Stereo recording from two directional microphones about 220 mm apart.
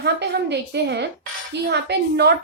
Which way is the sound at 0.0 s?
50° right (ahead or behind).